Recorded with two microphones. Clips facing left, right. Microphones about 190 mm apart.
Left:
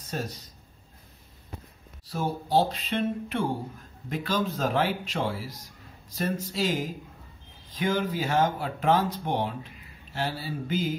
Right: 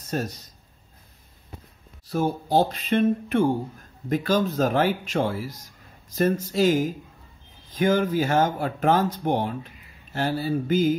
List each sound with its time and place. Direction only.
0.1 s speech: 45° right (ahead or behind)
2.0 s speech: 50° right (ahead or behind)